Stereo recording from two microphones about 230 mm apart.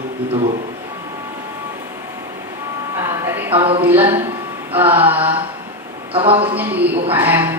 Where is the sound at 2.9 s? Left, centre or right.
Centre.